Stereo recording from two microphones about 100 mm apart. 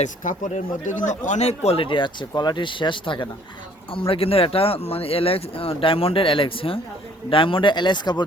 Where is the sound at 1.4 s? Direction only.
85° left; by 3.2 s 55° left (ahead or behind).